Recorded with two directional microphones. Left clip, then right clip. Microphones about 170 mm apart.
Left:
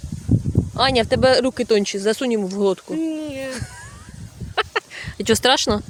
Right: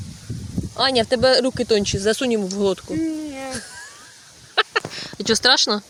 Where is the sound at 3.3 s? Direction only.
90° left.